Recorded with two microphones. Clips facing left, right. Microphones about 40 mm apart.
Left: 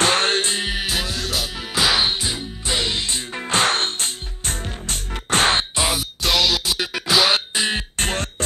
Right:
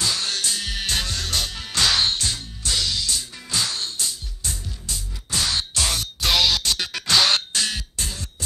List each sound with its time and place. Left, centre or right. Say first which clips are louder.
0.0 s music: left 7 dB; left
0.7 s music: left 2 dB; centre; by 3.3 s left
3.3 s music: left 12 dB; left
5.8 s music: left 3 dB; centre
6.2 s music: left 1 dB; centre
8.0 s a sound: left 9 dB; left